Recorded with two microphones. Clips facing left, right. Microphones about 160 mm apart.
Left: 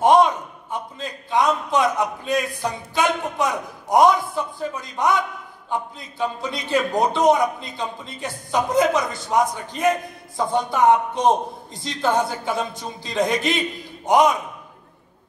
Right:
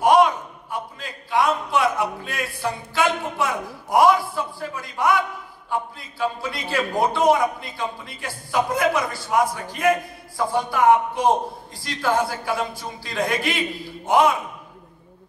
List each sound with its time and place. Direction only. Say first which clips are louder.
0.0 s a man's voice: left 1 dB; 25° left (ahead or behind)